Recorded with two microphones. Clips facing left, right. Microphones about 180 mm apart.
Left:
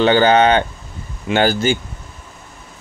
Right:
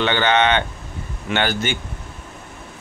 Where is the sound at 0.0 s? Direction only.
35° left (ahead or behind).